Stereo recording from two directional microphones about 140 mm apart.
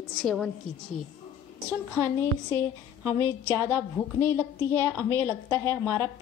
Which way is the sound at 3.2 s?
15° left (ahead or behind).